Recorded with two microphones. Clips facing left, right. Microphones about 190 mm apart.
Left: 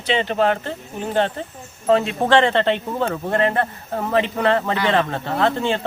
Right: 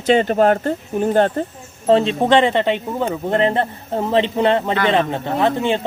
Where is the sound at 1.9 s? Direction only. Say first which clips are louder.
Right 3 dB; 30° right (ahead or behind).